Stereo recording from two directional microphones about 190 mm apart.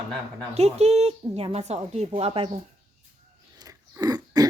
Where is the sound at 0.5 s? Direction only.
35° right (ahead or behind).